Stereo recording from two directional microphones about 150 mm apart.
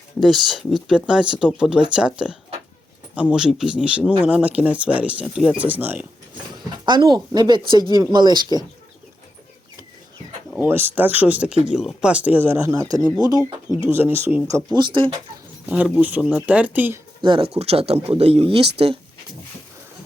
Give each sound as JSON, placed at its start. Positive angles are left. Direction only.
{"t": 0.2, "sound": "speech", "side_deg": 0}
{"t": 6.8, "sound": "speech", "side_deg": -30}
{"t": 10.6, "sound": "speech", "side_deg": -15}
{"t": 13.7, "sound": "speech", "side_deg": 30}
{"t": 13.9, "sound": "speech", "side_deg": -15}
{"t": 15.7, "sound": "speech", "side_deg": -10}
{"t": 17.2, "sound": "speech", "side_deg": -35}